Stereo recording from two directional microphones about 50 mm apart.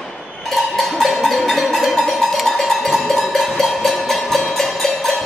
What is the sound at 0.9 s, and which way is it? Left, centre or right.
Cowbell, centre.